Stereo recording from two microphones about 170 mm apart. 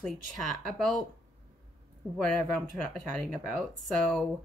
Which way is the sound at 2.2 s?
5° left (ahead or behind).